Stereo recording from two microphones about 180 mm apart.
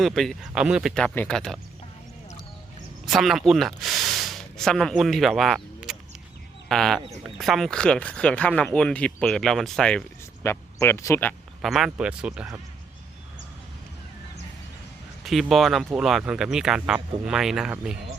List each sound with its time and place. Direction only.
0.0 s speech: centre (ahead or behind)
3.1 s speech: centre (ahead or behind)
10.4 s speech: 15° left (ahead or behind)
11.6 s speech: centre (ahead or behind)
15.2 s speech: centre (ahead or behind)